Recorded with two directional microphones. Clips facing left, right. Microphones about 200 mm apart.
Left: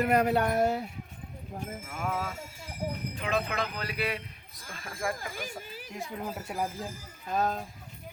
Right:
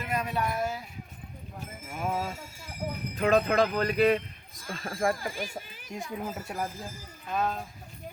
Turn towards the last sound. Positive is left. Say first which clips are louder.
# left 1 dB
turn(degrees=40)  # may be behind; listen again after turning